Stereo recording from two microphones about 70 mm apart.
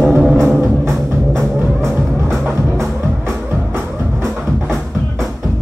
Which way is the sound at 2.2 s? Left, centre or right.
Right.